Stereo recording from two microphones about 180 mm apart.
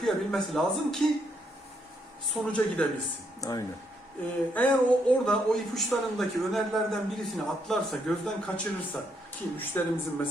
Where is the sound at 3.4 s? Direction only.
20° left (ahead or behind).